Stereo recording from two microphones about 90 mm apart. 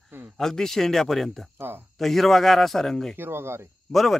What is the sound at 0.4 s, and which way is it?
Speech, 5° left (ahead or behind).